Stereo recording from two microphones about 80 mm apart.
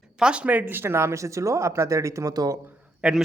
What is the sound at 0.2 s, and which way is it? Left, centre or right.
Speech, centre.